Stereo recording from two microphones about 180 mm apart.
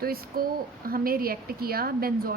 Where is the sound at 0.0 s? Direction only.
55° right (ahead or behind).